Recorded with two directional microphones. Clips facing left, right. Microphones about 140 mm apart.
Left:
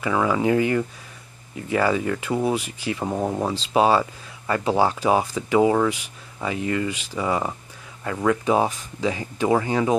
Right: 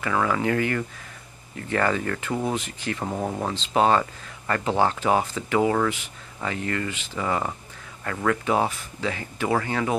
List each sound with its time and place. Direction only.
0.0 s speech: 15° left (ahead or behind)